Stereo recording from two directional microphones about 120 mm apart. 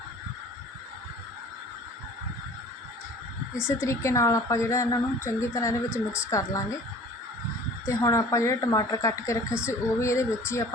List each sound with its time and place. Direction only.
3.7 s a woman's voice: 25° left (ahead or behind)
7.9 s a woman's voice: 25° left (ahead or behind)